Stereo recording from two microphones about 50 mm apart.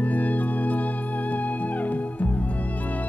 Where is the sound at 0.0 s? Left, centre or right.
Left.